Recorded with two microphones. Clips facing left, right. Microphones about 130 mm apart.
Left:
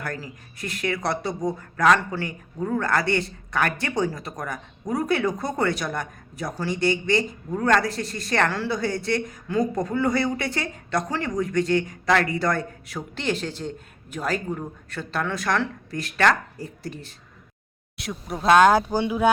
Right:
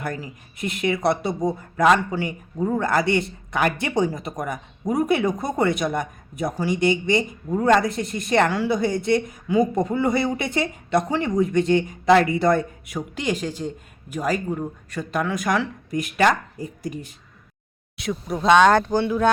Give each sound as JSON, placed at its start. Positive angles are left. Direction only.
{"t": 0.0, "sound": "a man's voice", "side_deg": -20}
{"t": 17.9, "sound": "speech", "side_deg": 0}